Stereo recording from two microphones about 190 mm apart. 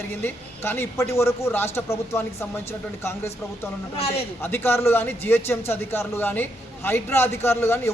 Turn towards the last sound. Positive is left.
turn(degrees=15)  # may be behind; listen again after turning